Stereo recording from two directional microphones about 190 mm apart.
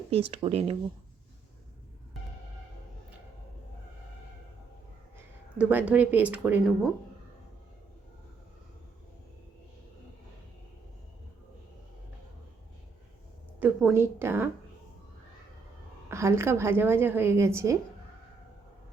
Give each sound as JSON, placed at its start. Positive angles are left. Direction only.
{"t": 0.1, "sound": "speech", "side_deg": -30}
{"t": 5.1, "sound": "speech", "side_deg": -10}
{"t": 13.6, "sound": "a woman's voice", "side_deg": -10}
{"t": 16.0, "sound": "a woman's voice", "side_deg": -15}